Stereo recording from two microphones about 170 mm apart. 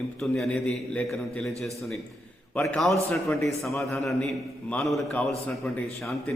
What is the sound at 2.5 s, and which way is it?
A man's voice, 10° left (ahead or behind).